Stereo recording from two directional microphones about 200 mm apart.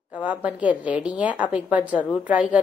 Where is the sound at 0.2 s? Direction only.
5° right (ahead or behind).